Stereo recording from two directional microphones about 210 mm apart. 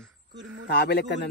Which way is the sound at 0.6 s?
50° left (ahead or behind).